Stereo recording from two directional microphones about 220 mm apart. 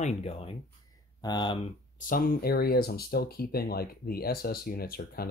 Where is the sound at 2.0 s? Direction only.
40° left (ahead or behind).